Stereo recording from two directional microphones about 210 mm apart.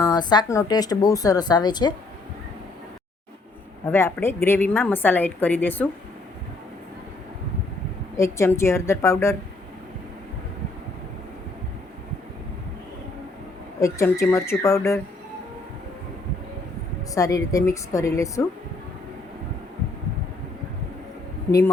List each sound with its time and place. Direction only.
0.0 s speech: 20° left (ahead or behind)
3.8 s a woman's voice: 10° left (ahead or behind)
8.1 s a woman's voice: 15° left (ahead or behind)
13.7 s a woman's voice: 15° left (ahead or behind)
17.2 s a woman's voice: 15° left (ahead or behind)